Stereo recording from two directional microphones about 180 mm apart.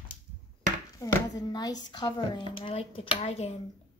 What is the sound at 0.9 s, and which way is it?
Speech, 20° left (ahead or behind).